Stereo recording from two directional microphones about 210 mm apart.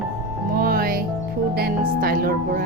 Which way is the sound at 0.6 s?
45° right (ahead or behind).